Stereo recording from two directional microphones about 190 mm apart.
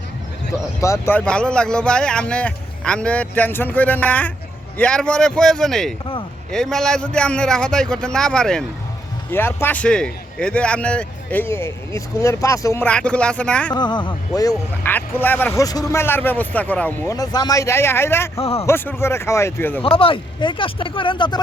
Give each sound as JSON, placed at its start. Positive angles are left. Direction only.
{"t": 0.8, "sound": "a man's voice", "side_deg": 15}
{"t": 13.7, "sound": "speech", "side_deg": 25}
{"t": 18.3, "sound": "a man's voice", "side_deg": 30}
{"t": 18.6, "sound": "speech", "side_deg": 15}
{"t": 19.8, "sound": "speech", "side_deg": 30}